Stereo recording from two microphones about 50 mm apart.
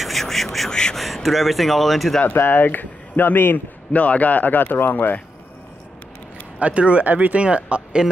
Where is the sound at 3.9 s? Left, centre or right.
Left.